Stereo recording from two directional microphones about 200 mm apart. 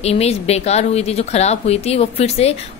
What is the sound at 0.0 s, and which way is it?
Speech, 30° left (ahead or behind).